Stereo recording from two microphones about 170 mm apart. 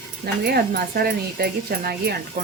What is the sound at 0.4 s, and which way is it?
Speech, 65° right (ahead or behind).